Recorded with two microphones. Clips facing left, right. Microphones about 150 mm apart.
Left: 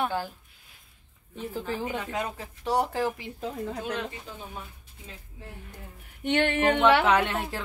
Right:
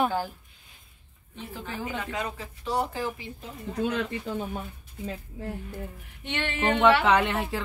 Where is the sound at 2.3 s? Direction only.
70° left (ahead or behind).